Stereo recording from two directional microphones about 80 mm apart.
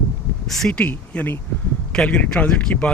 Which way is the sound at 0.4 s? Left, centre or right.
Centre.